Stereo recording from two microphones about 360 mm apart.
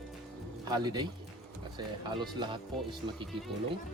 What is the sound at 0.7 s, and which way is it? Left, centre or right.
Speech, centre.